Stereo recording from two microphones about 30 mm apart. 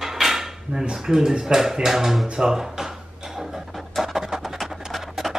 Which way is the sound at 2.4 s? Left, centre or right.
Centre.